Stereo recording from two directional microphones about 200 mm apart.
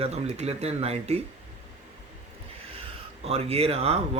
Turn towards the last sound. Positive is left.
turn(degrees=-30)  # may be behind; listen again after turning